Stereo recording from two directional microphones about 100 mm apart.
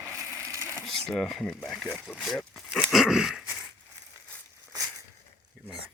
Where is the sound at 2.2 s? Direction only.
5° left (ahead or behind).